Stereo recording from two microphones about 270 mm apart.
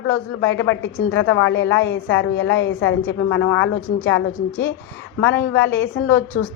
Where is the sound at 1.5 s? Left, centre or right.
Left.